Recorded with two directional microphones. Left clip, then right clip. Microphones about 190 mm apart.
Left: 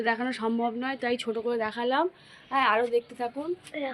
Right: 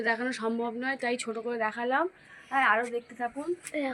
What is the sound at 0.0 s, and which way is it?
A woman's voice, 40° left (ahead or behind).